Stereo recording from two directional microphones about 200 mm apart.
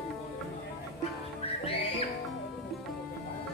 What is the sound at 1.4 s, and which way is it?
Music, 30° left (ahead or behind).